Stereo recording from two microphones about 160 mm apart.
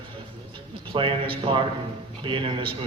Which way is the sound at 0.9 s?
35° right (ahead or behind).